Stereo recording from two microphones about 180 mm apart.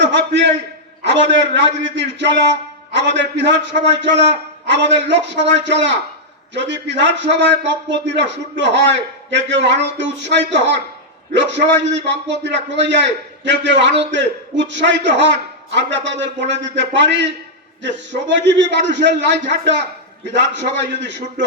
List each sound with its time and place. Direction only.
0.0 s a man's voice: 75° right (ahead or behind)